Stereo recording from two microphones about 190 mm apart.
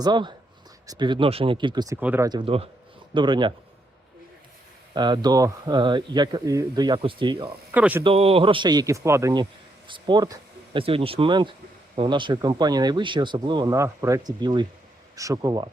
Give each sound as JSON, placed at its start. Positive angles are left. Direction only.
{"t": 0.0, "sound": "speech", "side_deg": -25}
{"t": 2.0, "sound": "speech", "side_deg": -10}
{"t": 2.4, "sound": "speech", "side_deg": -30}
{"t": 4.9, "sound": "speech", "side_deg": -25}
{"t": 7.7, "sound": "speech", "side_deg": -10}
{"t": 8.0, "sound": "speech", "side_deg": -30}